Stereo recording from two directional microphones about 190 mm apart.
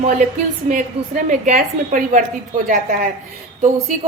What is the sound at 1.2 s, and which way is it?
A woman's voice, 40° right (ahead or behind).